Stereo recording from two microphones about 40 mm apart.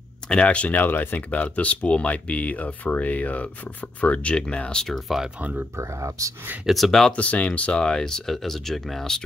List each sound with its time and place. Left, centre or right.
0.3 s speech: left
1.3 s speech: left
4.8 s speech: centre
5.4 s speech: right
6.7 s speech: centre
7.1 s speech: left
7.8 s speech: centre